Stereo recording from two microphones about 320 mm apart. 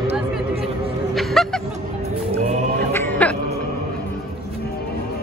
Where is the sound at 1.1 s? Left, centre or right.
Centre.